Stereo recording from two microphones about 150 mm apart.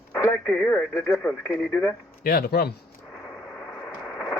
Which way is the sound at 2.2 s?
80° left.